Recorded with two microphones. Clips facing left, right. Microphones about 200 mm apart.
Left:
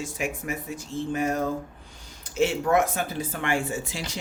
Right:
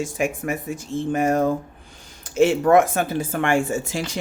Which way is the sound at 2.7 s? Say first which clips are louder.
Right 7 dB; 50° right (ahead or behind).